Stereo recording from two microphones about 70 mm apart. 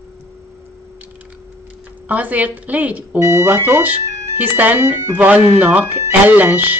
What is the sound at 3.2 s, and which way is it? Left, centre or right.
Speech, right.